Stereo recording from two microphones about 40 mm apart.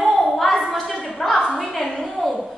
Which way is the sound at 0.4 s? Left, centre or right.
Centre.